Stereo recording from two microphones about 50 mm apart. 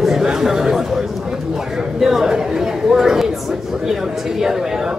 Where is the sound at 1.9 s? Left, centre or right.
Centre.